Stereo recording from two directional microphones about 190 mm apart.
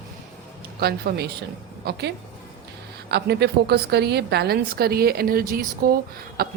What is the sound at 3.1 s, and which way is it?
Speech, 60° right (ahead or behind).